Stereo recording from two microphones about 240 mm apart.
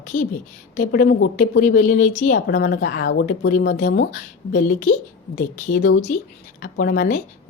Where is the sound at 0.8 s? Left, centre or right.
Left.